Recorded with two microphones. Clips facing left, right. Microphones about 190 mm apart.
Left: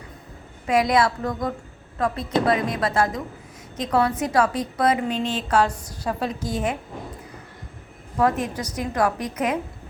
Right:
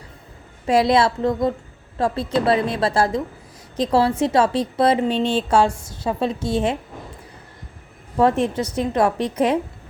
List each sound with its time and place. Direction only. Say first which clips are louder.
0.7 s a woman's voice: right 3 dB; 30° right (ahead or behind)
8.2 s a woman's voice: right 4 dB; 25° right (ahead or behind)